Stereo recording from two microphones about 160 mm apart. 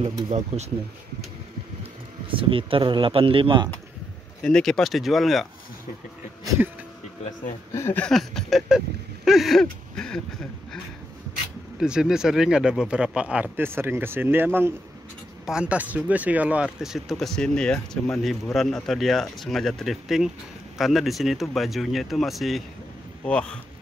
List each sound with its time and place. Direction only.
0.0 s speech: 35° right (ahead or behind)
2.3 s speech: 35° right (ahead or behind)
4.4 s speech: 5° left (ahead or behind)
7.7 s speech: 15° left (ahead or behind)
11.8 s speech: 5° right (ahead or behind)